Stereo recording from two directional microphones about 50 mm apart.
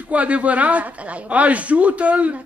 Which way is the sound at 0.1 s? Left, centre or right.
Right.